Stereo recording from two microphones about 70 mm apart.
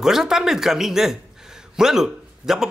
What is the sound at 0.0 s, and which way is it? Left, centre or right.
Speech, centre.